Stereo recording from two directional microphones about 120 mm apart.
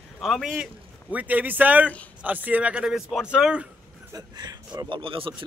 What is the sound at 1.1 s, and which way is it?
A man's voice, 15° right (ahead or behind).